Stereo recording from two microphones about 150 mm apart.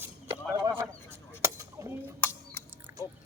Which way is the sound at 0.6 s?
20° right (ahead or behind).